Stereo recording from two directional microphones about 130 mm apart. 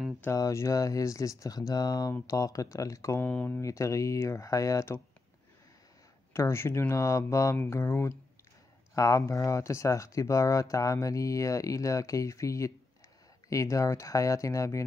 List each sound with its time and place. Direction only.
0.2 s speech: 25° left (ahead or behind)
6.3 s speech: 20° left (ahead or behind)